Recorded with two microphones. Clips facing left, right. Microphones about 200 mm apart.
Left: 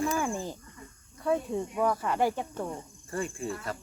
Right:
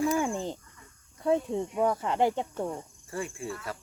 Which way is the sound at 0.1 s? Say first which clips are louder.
Right 2 dB; 20° right (ahead or behind).